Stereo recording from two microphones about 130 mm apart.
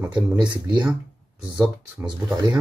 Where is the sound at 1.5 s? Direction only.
10° right (ahead or behind).